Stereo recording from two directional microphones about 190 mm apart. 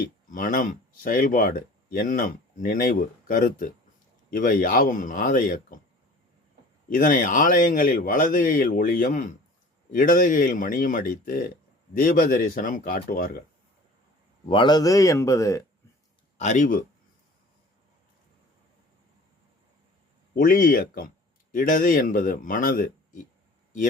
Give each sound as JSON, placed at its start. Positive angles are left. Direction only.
{"t": 0.0, "sound": "speech", "side_deg": 45}
{"t": 6.9, "sound": "speech", "side_deg": 45}
{"t": 14.4, "sound": "speech", "side_deg": 25}
{"t": 16.4, "sound": "speech", "side_deg": 40}
{"t": 20.3, "sound": "speech", "side_deg": 50}